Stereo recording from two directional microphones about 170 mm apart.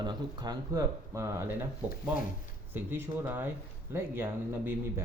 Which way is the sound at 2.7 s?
15° right (ahead or behind).